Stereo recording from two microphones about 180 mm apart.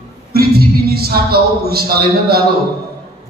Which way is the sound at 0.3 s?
60° right (ahead or behind).